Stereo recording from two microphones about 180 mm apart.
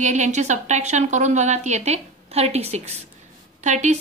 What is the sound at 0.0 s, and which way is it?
A woman's voice, 40° right (ahead or behind).